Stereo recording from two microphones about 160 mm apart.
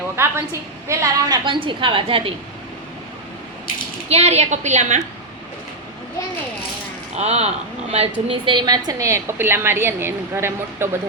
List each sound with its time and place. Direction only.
0.2 s a woman's voice: 15° right (ahead or behind)
1.5 s a woman's voice: 35° right (ahead or behind)
4.1 s a woman's voice: 40° right (ahead or behind)
7.2 s a woman's voice: 40° right (ahead or behind); by 10.8 s 15° right (ahead or behind)